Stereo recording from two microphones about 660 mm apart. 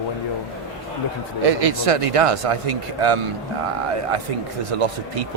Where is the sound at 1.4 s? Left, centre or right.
Right.